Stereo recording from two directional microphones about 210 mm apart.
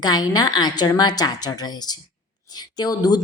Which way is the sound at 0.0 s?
20° left (ahead or behind).